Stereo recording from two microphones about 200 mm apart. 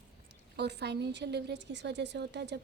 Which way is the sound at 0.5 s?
55° right (ahead or behind).